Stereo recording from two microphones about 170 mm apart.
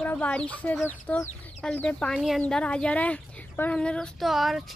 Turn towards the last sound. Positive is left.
turn(degrees=0)  # may be behind; listen again after turning